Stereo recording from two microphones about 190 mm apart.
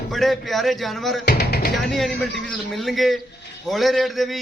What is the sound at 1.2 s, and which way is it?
Speech, 55° left (ahead or behind).